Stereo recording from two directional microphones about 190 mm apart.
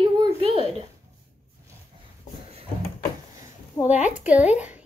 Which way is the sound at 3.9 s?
35° left (ahead or behind).